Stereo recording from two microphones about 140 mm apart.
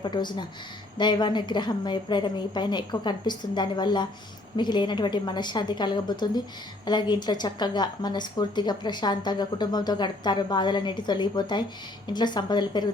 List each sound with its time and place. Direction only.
0.0 s a woman's voice: 30° left (ahead or behind)